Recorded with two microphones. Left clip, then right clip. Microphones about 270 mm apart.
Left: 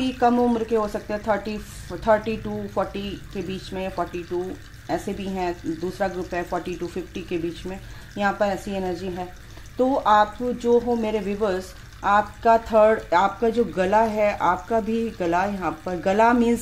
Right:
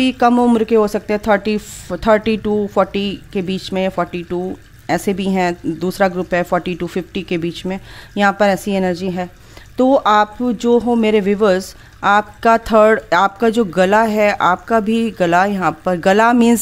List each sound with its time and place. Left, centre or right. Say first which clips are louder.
0.0 s speech: right 7 dB; right